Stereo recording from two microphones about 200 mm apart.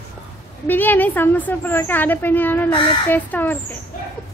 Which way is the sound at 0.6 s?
10° left (ahead or behind).